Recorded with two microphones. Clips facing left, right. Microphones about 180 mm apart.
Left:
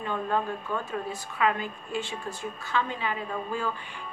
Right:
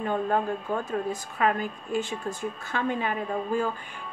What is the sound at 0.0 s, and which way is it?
A woman's voice, 45° right (ahead or behind).